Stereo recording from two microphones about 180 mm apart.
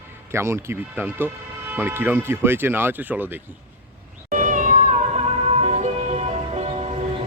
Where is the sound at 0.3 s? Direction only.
15° right (ahead or behind).